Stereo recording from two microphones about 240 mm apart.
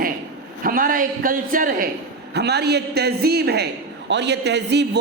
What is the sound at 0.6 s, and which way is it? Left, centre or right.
A man's voice, right.